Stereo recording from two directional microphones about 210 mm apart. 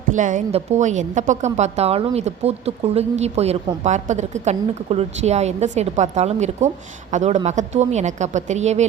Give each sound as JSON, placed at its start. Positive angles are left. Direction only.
{"t": 0.1, "sound": "a woman's voice", "side_deg": -35}